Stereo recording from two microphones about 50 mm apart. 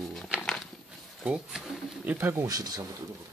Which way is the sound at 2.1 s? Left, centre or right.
Right.